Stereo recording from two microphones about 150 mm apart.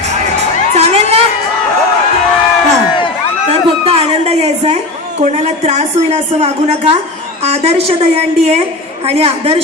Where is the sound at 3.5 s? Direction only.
40° right (ahead or behind).